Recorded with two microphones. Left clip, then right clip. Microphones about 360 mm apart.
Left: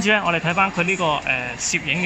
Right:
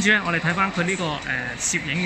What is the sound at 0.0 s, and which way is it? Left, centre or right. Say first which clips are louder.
Speech: left 1 dB; centre.